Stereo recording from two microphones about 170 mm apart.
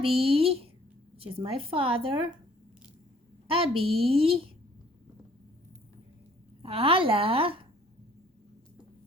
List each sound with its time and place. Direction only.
0.0 s a woman's voice: 35° right (ahead or behind)
3.4 s a woman's voice: 35° right (ahead or behind)
6.6 s a woman's voice: 35° right (ahead or behind)